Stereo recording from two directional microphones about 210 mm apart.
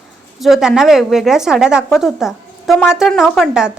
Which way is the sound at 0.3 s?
Centre (ahead or behind).